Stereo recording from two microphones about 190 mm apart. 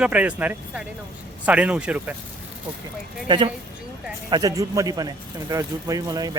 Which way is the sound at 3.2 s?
25° right (ahead or behind).